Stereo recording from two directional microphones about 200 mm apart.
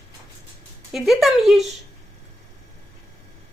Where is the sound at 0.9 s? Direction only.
Centre (ahead or behind).